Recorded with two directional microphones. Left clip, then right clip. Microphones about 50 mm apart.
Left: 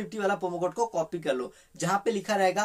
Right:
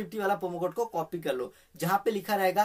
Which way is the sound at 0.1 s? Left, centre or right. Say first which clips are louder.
Left 1 dB; right.